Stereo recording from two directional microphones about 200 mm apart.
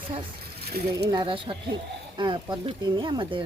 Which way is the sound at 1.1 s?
25° right (ahead or behind).